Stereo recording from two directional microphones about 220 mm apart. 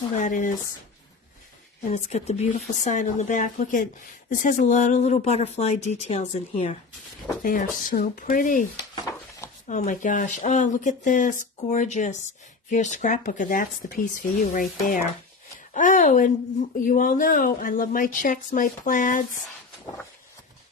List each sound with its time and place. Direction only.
0.1 s speech: 35° left (ahead or behind)
1.9 s speech: 30° left (ahead or behind)
9.7 s speech: 35° left (ahead or behind)